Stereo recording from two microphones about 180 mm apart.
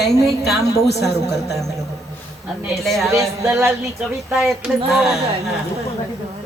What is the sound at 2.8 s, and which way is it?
Speech, centre (ahead or behind).